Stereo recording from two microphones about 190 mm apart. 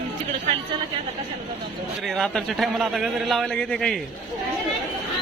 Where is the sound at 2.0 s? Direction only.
Centre (ahead or behind).